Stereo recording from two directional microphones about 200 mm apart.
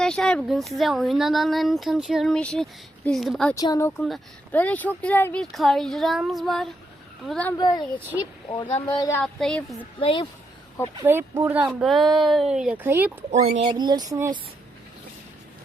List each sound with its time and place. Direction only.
0.0 s speech: 5° left (ahead or behind)
3.5 s speech: 15° left (ahead or behind)
7.6 s a child's voice: 20° left (ahead or behind)
8.1 s speech: 10° right (ahead or behind)
8.9 s a child's voice: 20° left (ahead or behind)
9.1 s speech: 5° left (ahead or behind)
10.0 s a child's voice: 25° left (ahead or behind)
11.0 s speech: 10° right (ahead or behind)
13.3 s speech: 35° right (ahead or behind)
13.7 s speech: 20° right (ahead or behind)